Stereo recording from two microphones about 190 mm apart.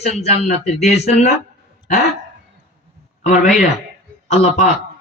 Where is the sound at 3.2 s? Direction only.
40° left (ahead or behind).